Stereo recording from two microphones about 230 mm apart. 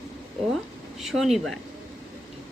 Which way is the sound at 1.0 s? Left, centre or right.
Centre.